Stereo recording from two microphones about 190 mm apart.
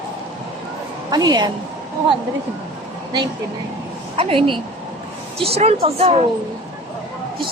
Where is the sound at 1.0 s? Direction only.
20° right (ahead or behind).